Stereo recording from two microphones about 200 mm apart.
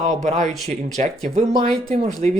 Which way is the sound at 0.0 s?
35° right (ahead or behind).